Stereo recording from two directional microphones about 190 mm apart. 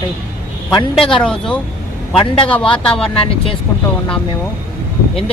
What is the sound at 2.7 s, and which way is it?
Speech, 5° left (ahead or behind).